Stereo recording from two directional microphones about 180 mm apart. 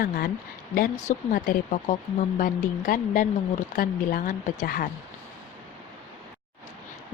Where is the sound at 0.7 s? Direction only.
45° left (ahead or behind).